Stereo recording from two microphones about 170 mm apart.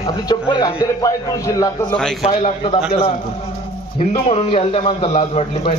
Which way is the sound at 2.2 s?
35° left (ahead or behind).